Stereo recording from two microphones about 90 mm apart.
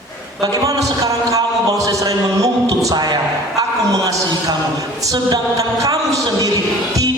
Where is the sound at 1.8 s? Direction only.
40° right (ahead or behind).